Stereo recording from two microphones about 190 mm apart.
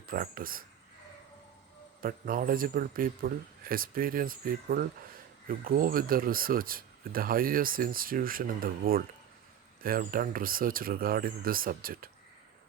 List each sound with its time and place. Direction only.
0.1 s speech: 50° right (ahead or behind)
2.0 s speech: 50° right (ahead or behind)